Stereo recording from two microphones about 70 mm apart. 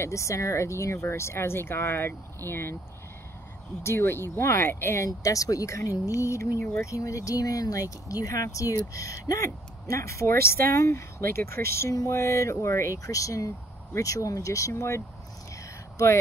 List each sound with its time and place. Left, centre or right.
0.0 s speech: left
3.8 s speech: left
5.0 s speech: left
11.9 s speech: left